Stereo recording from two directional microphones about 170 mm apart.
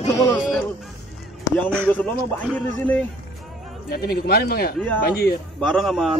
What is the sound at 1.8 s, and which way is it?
A man's voice, 10° left (ahead or behind).